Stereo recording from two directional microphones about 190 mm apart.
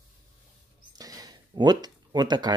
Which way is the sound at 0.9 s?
20° right (ahead or behind).